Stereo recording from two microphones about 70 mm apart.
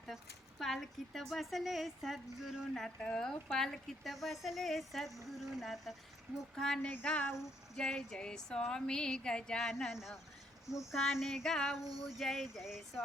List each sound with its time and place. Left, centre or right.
0.1 s a woman's voice: centre
2.7 s a woman's voice: centre
6.8 s female singing: left
7.8 s a woman's voice: centre